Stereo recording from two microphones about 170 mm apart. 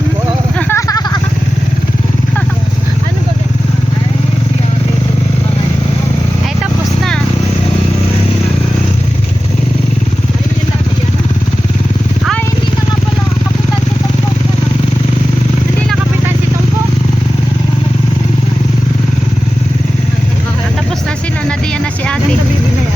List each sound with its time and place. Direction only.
0.7 s vehicle: 20° left (ahead or behind)